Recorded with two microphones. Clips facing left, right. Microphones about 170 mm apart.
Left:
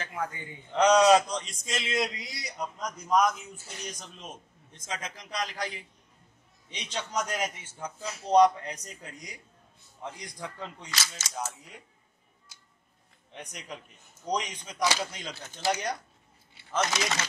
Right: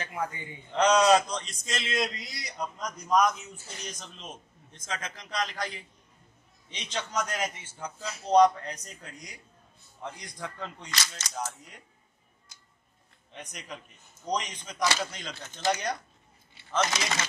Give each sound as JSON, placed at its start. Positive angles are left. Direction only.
{"t": 0.0, "sound": "a man's voice", "side_deg": -15}
{"t": 0.7, "sound": "speech", "side_deg": 15}
{"t": 4.8, "sound": "speech", "side_deg": 15}
{"t": 13.3, "sound": "speech", "side_deg": 10}